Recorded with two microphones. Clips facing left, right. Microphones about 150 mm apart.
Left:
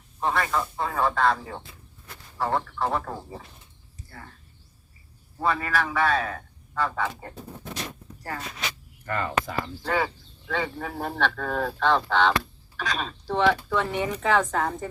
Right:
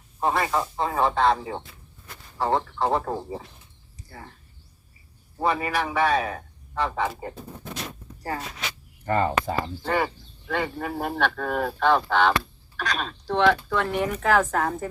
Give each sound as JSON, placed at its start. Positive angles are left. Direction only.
{"t": 0.2, "sound": "speech", "side_deg": -30}
{"t": 5.4, "sound": "speech", "side_deg": -20}
{"t": 9.0, "sound": "speech", "side_deg": -30}
{"t": 9.8, "sound": "speech", "side_deg": -10}